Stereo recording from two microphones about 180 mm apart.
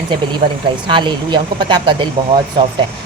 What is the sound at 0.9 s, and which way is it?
Speech, 25° right (ahead or behind).